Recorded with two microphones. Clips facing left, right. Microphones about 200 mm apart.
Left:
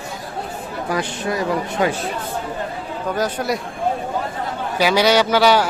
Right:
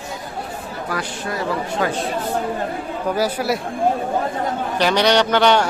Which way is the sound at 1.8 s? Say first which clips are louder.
Left 3 dB; 20° left (ahead or behind).